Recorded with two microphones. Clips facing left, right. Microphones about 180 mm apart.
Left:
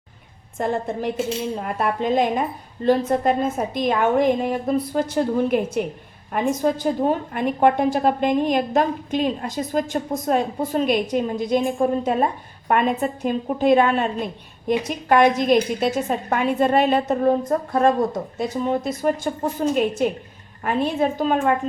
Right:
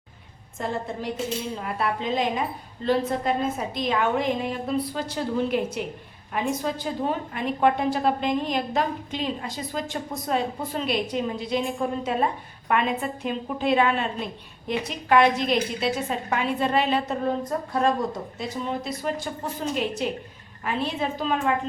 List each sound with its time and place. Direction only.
0.6 s a woman's voice: 55° left (ahead or behind)